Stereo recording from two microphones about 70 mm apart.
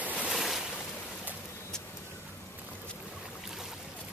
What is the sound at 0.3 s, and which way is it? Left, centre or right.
Boat, centre.